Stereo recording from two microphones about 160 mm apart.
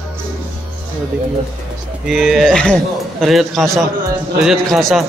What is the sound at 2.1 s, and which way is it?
Speech, centre (ahead or behind).